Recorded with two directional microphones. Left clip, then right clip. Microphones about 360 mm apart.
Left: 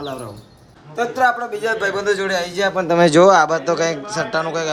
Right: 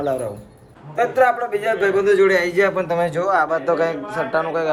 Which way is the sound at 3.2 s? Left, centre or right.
Centre.